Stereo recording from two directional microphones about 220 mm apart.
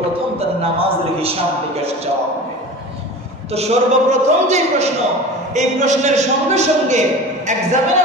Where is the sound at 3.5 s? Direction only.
30° right (ahead or behind).